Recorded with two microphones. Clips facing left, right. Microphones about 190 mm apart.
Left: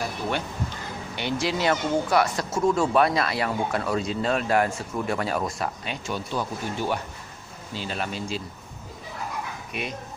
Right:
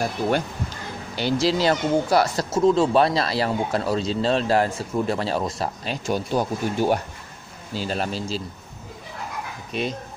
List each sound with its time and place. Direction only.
1.1 s speech: 35° right (ahead or behind)
2.5 s speech: 20° right (ahead or behind)
9.7 s speech: 30° right (ahead or behind)